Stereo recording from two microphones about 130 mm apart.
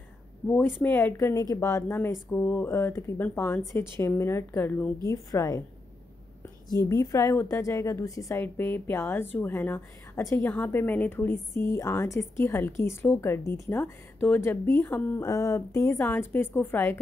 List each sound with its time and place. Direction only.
0.5 s a woman's voice: 15° left (ahead or behind)
1.1 s a woman's voice: 25° left (ahead or behind)
5.0 s a woman's voice: 25° left (ahead or behind)
6.7 s a woman's voice: 25° left (ahead or behind)
15.2 s a woman's voice: 25° left (ahead or behind)